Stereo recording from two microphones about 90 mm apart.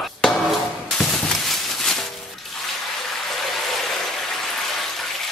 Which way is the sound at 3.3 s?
Centre (ahead or behind).